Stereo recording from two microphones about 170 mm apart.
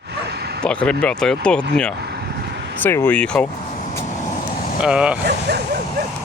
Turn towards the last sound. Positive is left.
turn(degrees=-5)  # may be behind; listen again after turning